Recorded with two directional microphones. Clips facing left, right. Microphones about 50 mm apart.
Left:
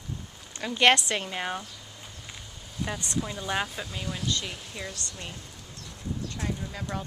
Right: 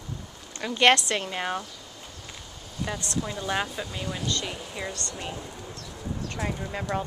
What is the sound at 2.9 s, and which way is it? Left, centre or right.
Speech, left.